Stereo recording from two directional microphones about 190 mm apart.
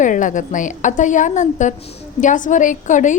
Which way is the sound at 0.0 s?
40° left (ahead or behind).